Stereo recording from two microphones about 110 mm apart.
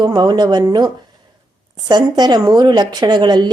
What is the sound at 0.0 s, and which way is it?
Speech, 40° right (ahead or behind).